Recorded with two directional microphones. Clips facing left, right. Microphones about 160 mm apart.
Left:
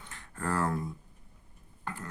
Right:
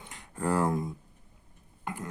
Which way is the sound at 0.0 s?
15° right (ahead or behind).